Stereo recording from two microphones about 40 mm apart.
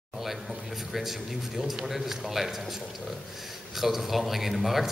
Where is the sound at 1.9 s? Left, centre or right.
Centre.